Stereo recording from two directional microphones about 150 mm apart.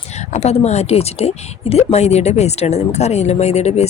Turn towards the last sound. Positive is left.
turn(degrees=45)  # may be behind; listen again after turning